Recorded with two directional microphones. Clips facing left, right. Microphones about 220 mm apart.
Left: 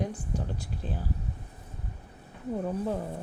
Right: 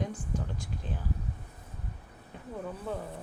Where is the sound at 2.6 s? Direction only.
40° left (ahead or behind).